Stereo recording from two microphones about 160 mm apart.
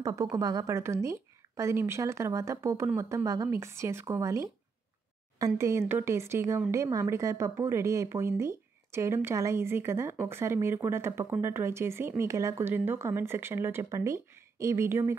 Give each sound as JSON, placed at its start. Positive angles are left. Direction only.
{"t": 0.0, "sound": "speech", "side_deg": -20}
{"t": 5.6, "sound": "speech", "side_deg": -15}